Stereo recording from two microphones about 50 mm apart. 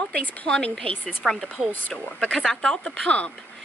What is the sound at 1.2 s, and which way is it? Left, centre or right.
Speech, centre.